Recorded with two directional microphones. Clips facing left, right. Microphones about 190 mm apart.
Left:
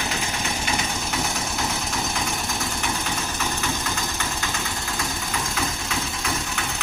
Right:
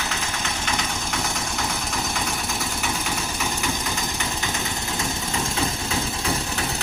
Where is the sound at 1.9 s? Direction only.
Centre (ahead or behind).